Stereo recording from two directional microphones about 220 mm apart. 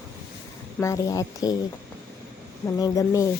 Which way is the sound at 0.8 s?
15° left (ahead or behind).